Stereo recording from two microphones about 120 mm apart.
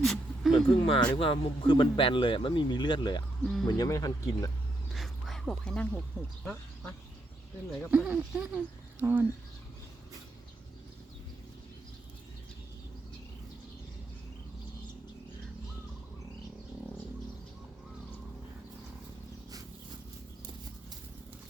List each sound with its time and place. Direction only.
0.0 s a sound: 5° left (ahead or behind)
0.5 s speech: 45° left (ahead or behind)
3.4 s speech: 5° left (ahead or behind)
3.7 s speech: 30° left (ahead or behind)
4.9 s dog: centre (ahead or behind)
6.1 s speech: 5° left (ahead or behind)
7.9 s speech: 10° right (ahead or behind)